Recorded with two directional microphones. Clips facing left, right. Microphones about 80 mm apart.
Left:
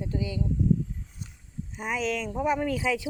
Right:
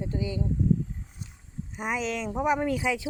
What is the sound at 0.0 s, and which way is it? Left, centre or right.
Speech, right.